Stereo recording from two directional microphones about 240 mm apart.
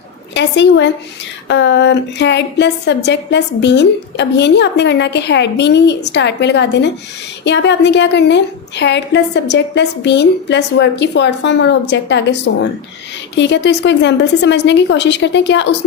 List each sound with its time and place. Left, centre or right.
0.3 s a woman's voice: left